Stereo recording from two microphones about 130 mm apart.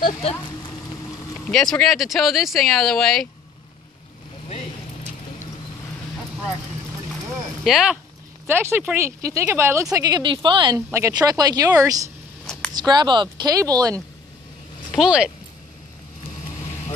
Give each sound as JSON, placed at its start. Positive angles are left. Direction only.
{"t": 0.0, "sound": "speech", "side_deg": 50}
{"t": 1.8, "sound": "speech", "side_deg": 0}
{"t": 7.6, "sound": "speech", "side_deg": -5}
{"t": 8.5, "sound": "speech", "side_deg": -15}
{"t": 9.9, "sound": "speech", "side_deg": -30}
{"t": 10.9, "sound": "speech", "side_deg": -25}
{"t": 14.9, "sound": "speech", "side_deg": -5}